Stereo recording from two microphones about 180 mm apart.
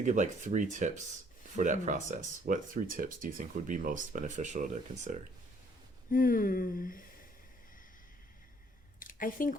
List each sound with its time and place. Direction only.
0.0 s speech: 45° right (ahead or behind)
6.1 s speech: 50° left (ahead or behind)
9.0 s a sound: 50° left (ahead or behind)